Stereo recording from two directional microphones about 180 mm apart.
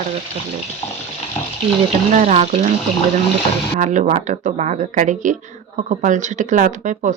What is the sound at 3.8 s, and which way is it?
Speech, 45° right (ahead or behind).